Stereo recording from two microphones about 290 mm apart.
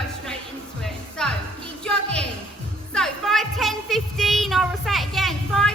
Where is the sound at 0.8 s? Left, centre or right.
Centre.